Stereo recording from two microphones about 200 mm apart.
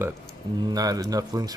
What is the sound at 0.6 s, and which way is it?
Speech, 20° right (ahead or behind).